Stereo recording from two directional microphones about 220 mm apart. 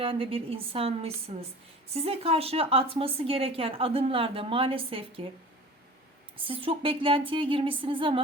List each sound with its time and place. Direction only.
0.0 s a woman's voice: 25° right (ahead or behind)
6.3 s a woman's voice: 25° right (ahead or behind)